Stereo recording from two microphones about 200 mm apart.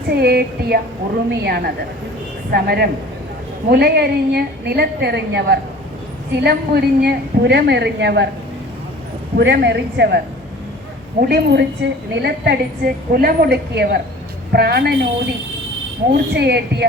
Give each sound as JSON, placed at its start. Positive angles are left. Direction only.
{"t": 0.1, "sound": "a woman's voice", "side_deg": -55}
{"t": 9.4, "sound": "a woman's voice", "side_deg": -60}
{"t": 11.2, "sound": "a woman's voice", "side_deg": -55}